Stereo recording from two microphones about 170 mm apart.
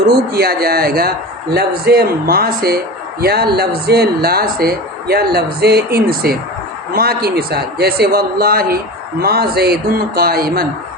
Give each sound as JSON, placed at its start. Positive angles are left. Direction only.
{"t": 0.3, "sound": "speech", "side_deg": -65}